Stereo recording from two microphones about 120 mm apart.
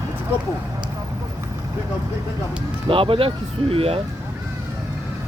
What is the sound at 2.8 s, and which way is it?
Speech, 50° right (ahead or behind).